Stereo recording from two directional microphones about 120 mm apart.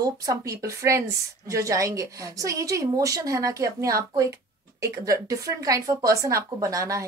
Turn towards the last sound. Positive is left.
turn(degrees=-25)  # may be behind; listen again after turning